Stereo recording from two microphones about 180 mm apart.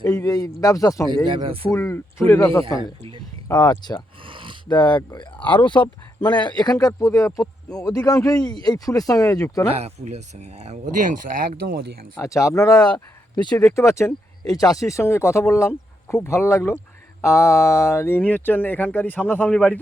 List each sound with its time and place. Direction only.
0.0 s speech: 10° left (ahead or behind)
1.2 s speech: 25° right (ahead or behind)
1.7 s speech: 15° left (ahead or behind)
4.2 s a sound: 30° right (ahead or behind)
4.7 s speech: 25° left (ahead or behind)
5.4 s speech: 10° left (ahead or behind)
6.4 s speech: 25° left (ahead or behind)
9.7 s speech: 35° right (ahead or behind)
11.6 s speech: 60° right (ahead or behind)
12.2 s speech: 15° left (ahead or behind)